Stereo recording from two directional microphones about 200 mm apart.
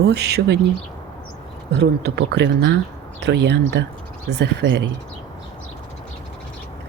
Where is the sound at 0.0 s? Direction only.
55° right (ahead or behind).